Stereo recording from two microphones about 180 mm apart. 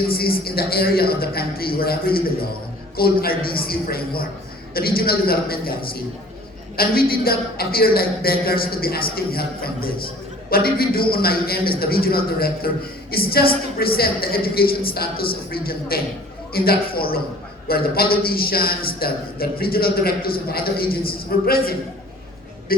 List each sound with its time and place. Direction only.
0.1 s a man's voice: 55° left (ahead or behind)